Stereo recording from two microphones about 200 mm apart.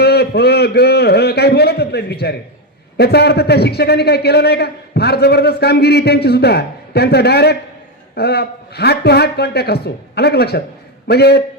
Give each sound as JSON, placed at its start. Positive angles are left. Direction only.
{"t": 0.0, "sound": "a man's voice", "side_deg": 55}